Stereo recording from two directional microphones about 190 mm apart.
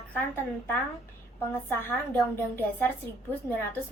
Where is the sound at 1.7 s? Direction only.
10° left (ahead or behind).